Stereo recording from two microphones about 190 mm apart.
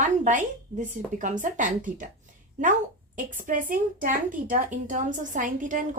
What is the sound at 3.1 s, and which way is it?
A woman's voice, 45° right (ahead or behind).